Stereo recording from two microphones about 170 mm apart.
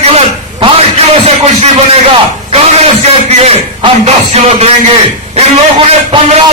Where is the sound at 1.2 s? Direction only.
40° right (ahead or behind).